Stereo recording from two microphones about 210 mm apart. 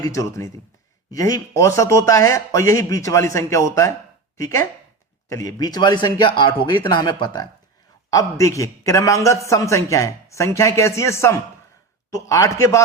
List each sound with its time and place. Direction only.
0.0 s a man's voice: 15° left (ahead or behind)